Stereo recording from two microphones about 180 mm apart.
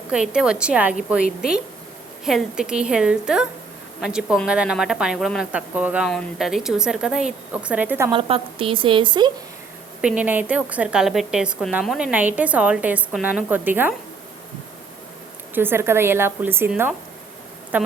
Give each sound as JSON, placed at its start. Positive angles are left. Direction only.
{"t": 0.1, "sound": "a woman's voice", "side_deg": -5}
{"t": 8.1, "sound": "a woman's voice", "side_deg": -30}
{"t": 10.0, "sound": "a woman's voice", "side_deg": -5}
{"t": 15.5, "sound": "a woman's voice", "side_deg": -10}